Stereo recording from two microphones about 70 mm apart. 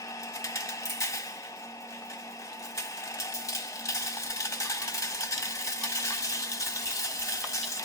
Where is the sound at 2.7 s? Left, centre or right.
Left.